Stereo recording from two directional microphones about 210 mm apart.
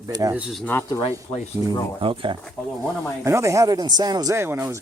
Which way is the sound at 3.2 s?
15° right (ahead or behind).